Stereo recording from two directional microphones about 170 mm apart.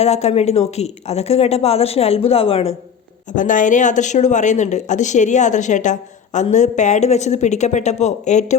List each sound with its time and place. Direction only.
0.0 s speech: 40° left (ahead or behind)
3.3 s speech: 50° left (ahead or behind)